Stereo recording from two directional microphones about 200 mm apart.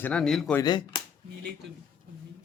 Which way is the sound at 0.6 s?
20° left (ahead or behind).